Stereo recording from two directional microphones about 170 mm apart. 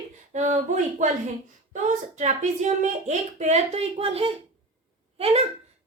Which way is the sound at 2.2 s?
45° right (ahead or behind).